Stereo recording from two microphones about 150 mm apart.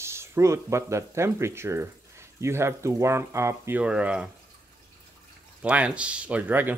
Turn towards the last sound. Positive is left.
turn(degrees=-10)  # may be behind; listen again after turning